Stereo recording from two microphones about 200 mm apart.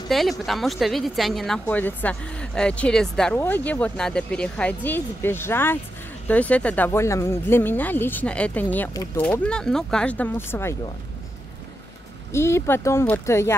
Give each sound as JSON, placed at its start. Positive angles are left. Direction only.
{"t": 0.1, "sound": "speech", "side_deg": 0}
{"t": 12.3, "sound": "speech", "side_deg": 15}